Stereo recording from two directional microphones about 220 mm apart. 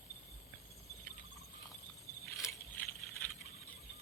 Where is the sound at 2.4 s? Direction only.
15° left (ahead or behind).